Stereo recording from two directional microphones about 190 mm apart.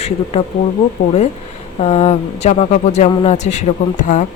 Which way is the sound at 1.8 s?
35° left (ahead or behind).